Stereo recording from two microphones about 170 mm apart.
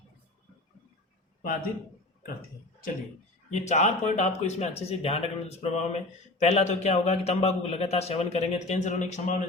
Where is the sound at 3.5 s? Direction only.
40° left (ahead or behind).